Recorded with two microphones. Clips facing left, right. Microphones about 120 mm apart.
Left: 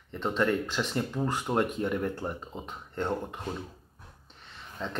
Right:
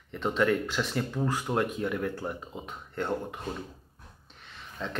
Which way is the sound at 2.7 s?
15° left (ahead or behind).